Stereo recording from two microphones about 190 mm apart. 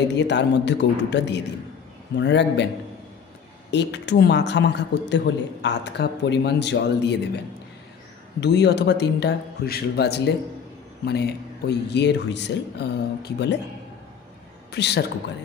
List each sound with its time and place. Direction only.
0.1 s a man's voice: 65° left (ahead or behind)
3.7 s a man's voice: 65° left (ahead or behind)
8.4 s a man's voice: 65° left (ahead or behind)
14.7 s a man's voice: 60° left (ahead or behind)